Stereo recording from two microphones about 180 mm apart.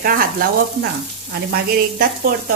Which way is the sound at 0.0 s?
55° right (ahead or behind).